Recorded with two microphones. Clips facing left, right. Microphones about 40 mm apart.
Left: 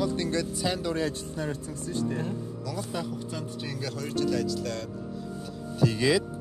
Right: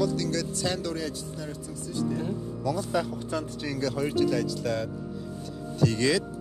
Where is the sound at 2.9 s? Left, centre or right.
Right.